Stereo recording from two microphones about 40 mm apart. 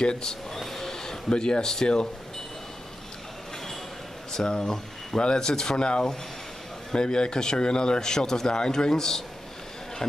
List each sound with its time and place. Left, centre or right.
0.0 s speech: centre
0.6 s a sound: centre
4.3 s speech: centre